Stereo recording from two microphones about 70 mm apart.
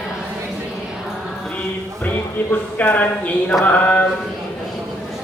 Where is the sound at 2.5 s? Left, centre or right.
Left.